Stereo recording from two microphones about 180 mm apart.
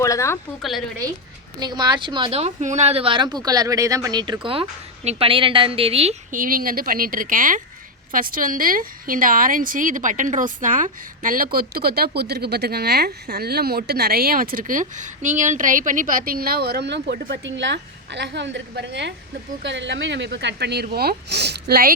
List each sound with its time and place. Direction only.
0.0 s speech: 15° left (ahead or behind)
0.6 s speech: centre (ahead or behind)
1.5 s a woman's voice: 25° right (ahead or behind)
6.3 s a woman's voice: 50° right (ahead or behind)